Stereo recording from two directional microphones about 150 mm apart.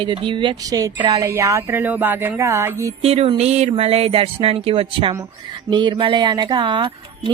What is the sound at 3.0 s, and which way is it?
Speech, 40° right (ahead or behind).